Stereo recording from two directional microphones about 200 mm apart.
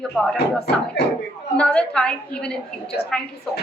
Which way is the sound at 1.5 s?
5° left (ahead or behind).